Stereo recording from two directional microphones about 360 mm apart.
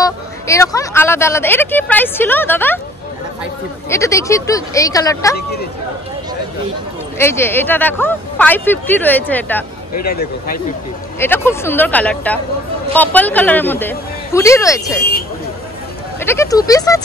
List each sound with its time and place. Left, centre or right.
0.0 s a woman's voice: centre
3.9 s a woman's voice: centre
7.2 s a woman's voice: centre
9.9 s speech: left
11.1 s a woman's voice: centre
16.2 s a woman's voice: centre